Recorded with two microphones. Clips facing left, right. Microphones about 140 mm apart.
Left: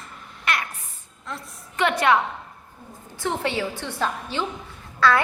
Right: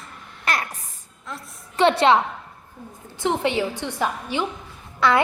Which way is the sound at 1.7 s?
30° right (ahead or behind).